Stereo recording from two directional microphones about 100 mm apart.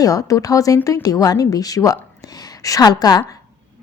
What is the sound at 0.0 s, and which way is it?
A woman's voice, 35° left (ahead or behind).